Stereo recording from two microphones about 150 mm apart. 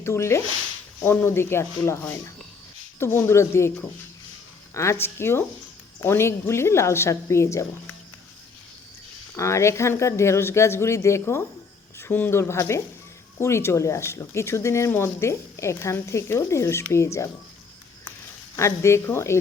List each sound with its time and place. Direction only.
0.0 s speech: 20° left (ahead or behind)
9.3 s speech: 20° left (ahead or behind)
18.5 s speech: 20° left (ahead or behind)